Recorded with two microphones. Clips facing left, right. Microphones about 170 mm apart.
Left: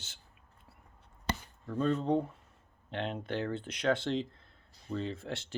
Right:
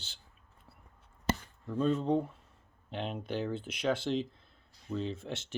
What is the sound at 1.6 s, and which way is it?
Speech, 10° right (ahead or behind).